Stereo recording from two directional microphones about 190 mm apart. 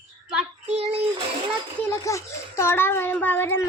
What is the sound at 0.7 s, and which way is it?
Child singing, 35° right (ahead or behind).